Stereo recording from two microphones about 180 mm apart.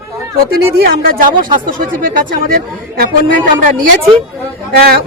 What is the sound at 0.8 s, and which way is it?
Speech, 55° right (ahead or behind).